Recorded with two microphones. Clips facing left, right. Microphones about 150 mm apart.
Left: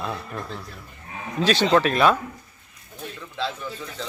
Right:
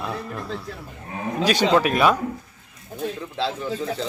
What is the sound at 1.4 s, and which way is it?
Speech, 15° right (ahead or behind).